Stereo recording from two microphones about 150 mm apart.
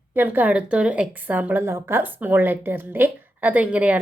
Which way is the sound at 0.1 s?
15° right (ahead or behind).